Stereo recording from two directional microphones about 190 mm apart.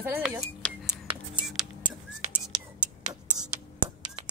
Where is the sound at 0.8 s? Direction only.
25° right (ahead or behind).